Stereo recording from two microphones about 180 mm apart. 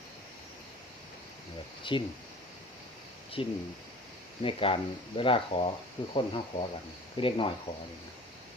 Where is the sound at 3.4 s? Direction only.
30° left (ahead or behind).